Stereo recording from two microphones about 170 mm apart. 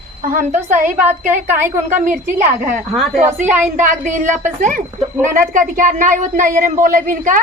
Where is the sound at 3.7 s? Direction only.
50° right (ahead or behind).